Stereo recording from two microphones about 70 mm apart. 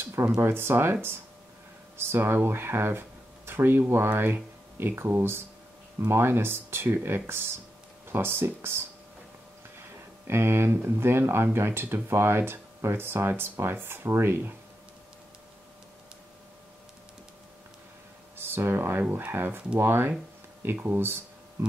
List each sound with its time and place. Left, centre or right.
0.0 s a sound: right
0.4 s speech: right
2.0 s speech: right
10.2 s speech: right
18.5 s speech: right